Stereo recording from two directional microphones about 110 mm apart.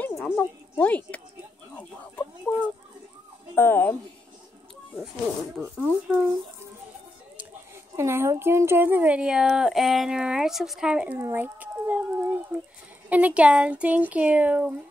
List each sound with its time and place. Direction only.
0.0 s speech: 15° left (ahead or behind)
3.5 s speech: 20° left (ahead or behind)
5.8 s speech: 20° right (ahead or behind)
7.9 s speech: 25° right (ahead or behind); by 11.1 s 10° right (ahead or behind)
11.1 s a sound: 20° right (ahead or behind)
13.1 s speech: 10° right (ahead or behind)